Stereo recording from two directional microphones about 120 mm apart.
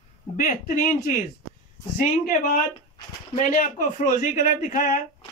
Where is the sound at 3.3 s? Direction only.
90° left.